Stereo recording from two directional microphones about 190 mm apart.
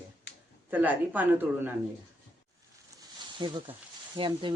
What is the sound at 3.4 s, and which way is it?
Speech, 25° right (ahead or behind).